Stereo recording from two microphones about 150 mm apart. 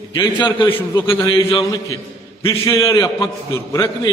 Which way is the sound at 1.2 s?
30° left (ahead or behind).